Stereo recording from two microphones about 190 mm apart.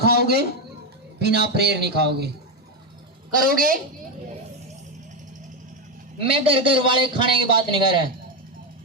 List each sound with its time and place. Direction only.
0.0 s a man's voice: 60° right (ahead or behind)
3.4 s a woman's voice: 50° right (ahead or behind)
6.2 s a man's voice: 30° right (ahead or behind)